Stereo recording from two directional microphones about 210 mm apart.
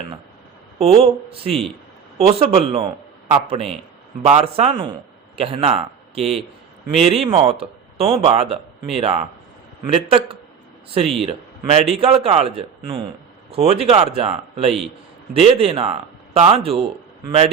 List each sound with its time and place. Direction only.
0.8 s a man's voice: 30° right (ahead or behind)